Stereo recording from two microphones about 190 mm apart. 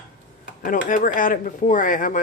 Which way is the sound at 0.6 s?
45° left (ahead or behind).